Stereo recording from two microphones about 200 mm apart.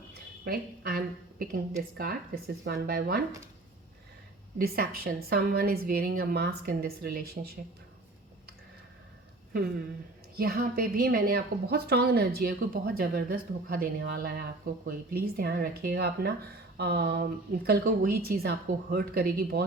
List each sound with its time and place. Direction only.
0.4 s a woman's voice: 50° right (ahead or behind)
4.5 s a woman's voice: 50° right (ahead or behind)
10.3 s a woman's voice: 50° right (ahead or behind)